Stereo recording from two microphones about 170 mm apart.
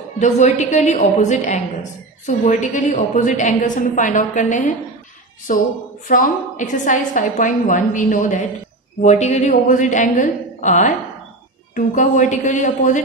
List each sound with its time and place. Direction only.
0.2 s a woman's voice: 45° left (ahead or behind)